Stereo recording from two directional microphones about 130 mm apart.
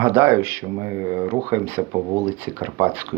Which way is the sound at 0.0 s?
20° right (ahead or behind).